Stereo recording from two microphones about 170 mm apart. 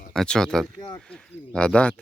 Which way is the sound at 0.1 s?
5° left (ahead or behind).